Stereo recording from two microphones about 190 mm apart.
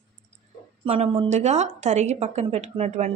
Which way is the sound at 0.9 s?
30° right (ahead or behind).